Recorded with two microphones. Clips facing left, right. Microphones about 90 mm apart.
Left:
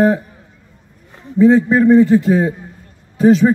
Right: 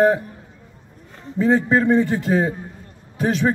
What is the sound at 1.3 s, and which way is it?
A man's voice, 5° left (ahead or behind).